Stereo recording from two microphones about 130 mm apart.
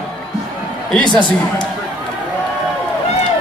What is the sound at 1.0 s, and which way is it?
Speech, 35° left (ahead or behind).